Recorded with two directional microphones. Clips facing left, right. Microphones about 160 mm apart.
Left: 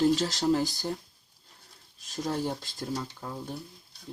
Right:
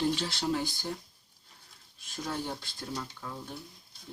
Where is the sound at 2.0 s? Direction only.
35° left (ahead or behind).